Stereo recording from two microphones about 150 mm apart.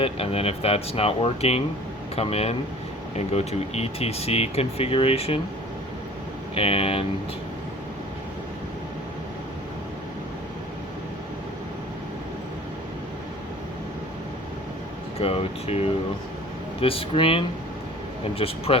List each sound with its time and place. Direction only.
0.0 s speech: 40° left (ahead or behind)
6.5 s speech: 40° left (ahead or behind)
15.2 s speech: 40° left (ahead or behind)
16.8 s speech: 40° left (ahead or behind)